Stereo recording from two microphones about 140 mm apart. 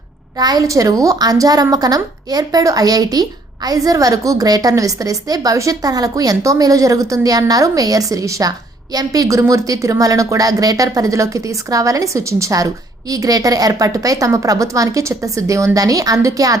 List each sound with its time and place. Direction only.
0.3 s a woman's voice: 30° right (ahead or behind)